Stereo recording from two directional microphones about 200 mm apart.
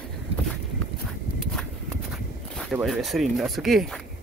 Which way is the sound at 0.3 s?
30° right (ahead or behind).